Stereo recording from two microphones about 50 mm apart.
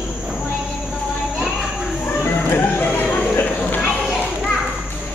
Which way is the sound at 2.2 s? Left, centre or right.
Left.